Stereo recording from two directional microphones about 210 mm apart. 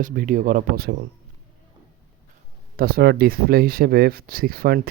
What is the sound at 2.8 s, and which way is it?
Speech, 45° right (ahead or behind).